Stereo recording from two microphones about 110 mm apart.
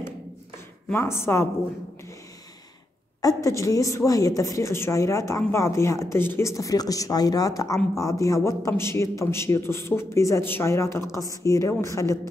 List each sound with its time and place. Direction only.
0.9 s speech: 25° left (ahead or behind)
3.2 s speech: 30° left (ahead or behind)